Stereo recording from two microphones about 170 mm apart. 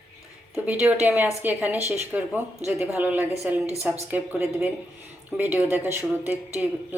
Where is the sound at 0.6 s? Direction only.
10° right (ahead or behind).